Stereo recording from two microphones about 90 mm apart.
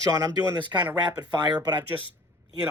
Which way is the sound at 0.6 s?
55° right (ahead or behind).